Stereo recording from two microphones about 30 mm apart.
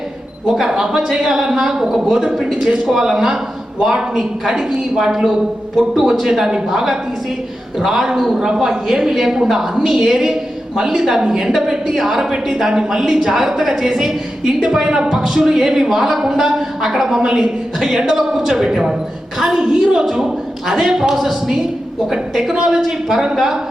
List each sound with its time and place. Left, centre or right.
0.6 s a woman's voice: centre
2.6 s speech: right
3.0 s a woman's voice: centre
8.5 s a man's voice: centre
12.2 s a woman's voice: right
22.5 s a woman's voice: right